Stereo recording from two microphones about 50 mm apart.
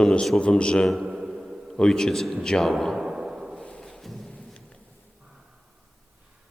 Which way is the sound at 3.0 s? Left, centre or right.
Centre.